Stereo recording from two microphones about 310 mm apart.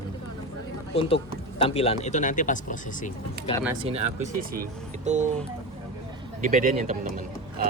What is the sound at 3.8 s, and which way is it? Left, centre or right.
Speech, right.